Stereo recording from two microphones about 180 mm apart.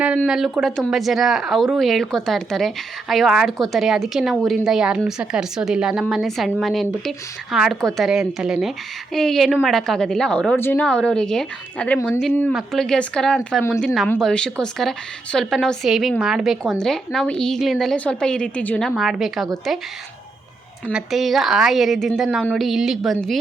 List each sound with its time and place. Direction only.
0.2 s speech: centre (ahead or behind)
11.9 s speech: 15° left (ahead or behind); by 19.5 s centre (ahead or behind)
20.9 s speech: centre (ahead or behind)